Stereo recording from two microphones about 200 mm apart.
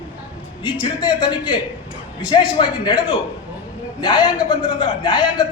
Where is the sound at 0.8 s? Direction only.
25° left (ahead or behind).